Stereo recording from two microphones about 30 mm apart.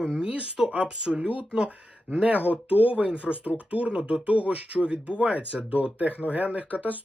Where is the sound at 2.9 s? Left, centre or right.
Right.